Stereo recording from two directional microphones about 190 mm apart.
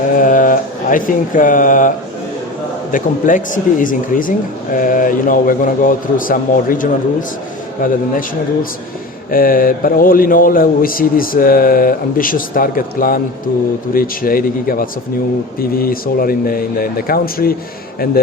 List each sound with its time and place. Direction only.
0.2 s speech: 45° left (ahead or behind)
2.9 s speech: 45° left (ahead or behind)
9.3 s speech: 50° left (ahead or behind)